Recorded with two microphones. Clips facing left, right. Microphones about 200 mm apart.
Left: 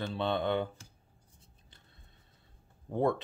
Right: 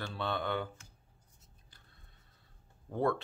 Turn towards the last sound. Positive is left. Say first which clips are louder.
# left 2 dB
turn(degrees=20)  # may be behind; listen again after turning